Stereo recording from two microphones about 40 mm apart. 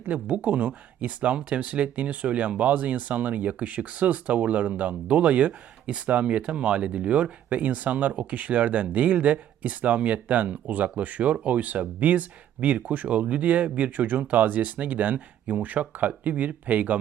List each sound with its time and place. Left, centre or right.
0.0 s speech: right